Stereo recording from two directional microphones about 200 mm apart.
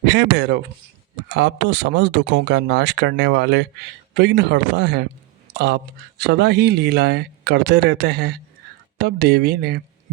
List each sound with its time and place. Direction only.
0.0 s speech: 60° right (ahead or behind)